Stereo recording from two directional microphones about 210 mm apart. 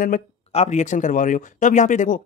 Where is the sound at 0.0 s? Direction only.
35° left (ahead or behind).